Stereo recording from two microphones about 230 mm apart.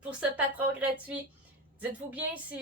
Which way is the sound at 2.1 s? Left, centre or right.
Centre.